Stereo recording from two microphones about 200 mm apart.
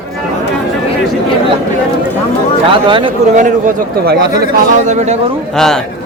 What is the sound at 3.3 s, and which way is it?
A man's voice, 40° right (ahead or behind).